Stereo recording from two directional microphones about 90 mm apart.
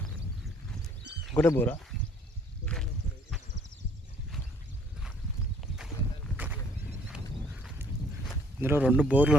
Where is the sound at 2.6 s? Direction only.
10° left (ahead or behind).